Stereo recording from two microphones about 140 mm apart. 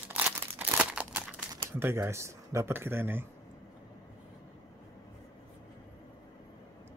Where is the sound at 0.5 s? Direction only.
10° right (ahead or behind).